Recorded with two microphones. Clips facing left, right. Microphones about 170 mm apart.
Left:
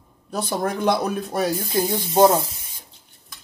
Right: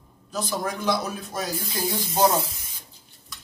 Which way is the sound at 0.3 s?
60° left (ahead or behind).